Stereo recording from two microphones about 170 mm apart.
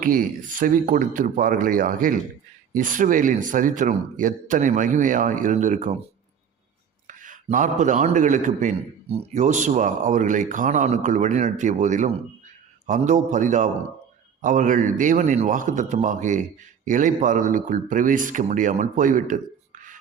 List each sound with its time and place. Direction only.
0.6 s a man's voice: 50° right (ahead or behind)
7.1 s a man's voice: 50° right (ahead or behind)